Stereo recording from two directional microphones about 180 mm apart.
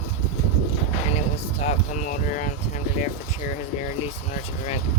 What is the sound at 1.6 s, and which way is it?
Speech, 40° left (ahead or behind).